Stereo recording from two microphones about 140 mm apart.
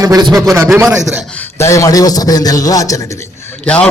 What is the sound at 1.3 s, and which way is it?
A man's voice, 15° left (ahead or behind).